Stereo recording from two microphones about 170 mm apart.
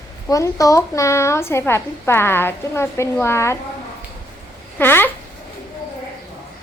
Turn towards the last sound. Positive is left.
turn(degrees=10)  # may be behind; listen again after turning